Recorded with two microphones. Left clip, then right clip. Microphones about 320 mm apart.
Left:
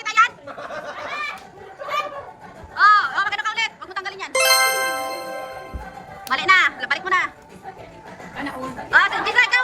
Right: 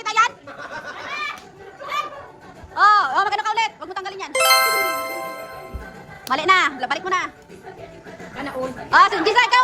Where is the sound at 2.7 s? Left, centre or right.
Centre.